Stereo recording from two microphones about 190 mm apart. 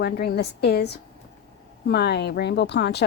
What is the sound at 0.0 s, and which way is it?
Speech, 60° left (ahead or behind).